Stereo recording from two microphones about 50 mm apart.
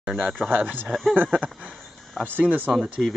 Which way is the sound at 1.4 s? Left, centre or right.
Right.